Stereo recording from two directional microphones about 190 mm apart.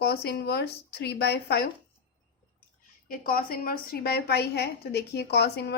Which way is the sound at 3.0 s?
50° left (ahead or behind).